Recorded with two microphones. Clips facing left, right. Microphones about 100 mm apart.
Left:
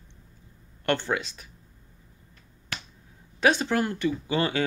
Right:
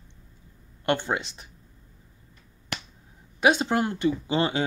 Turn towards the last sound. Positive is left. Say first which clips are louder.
# right 1 dB
turn(degrees=-20)  # may be behind; listen again after turning